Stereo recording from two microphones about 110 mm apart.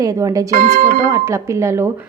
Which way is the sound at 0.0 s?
30° right (ahead or behind).